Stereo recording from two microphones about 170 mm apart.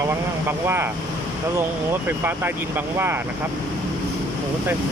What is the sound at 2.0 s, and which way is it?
Speech, 10° right (ahead or behind).